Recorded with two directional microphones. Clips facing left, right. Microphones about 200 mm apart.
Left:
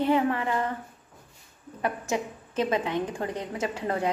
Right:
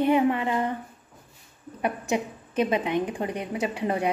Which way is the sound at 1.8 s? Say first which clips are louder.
Right 2 dB; 15° right (ahead or behind).